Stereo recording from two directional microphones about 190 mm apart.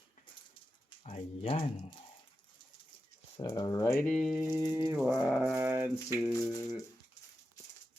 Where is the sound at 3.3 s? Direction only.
25° left (ahead or behind); by 4.4 s centre (ahead or behind).